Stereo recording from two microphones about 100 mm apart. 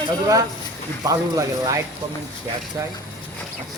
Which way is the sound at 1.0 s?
35° right (ahead or behind).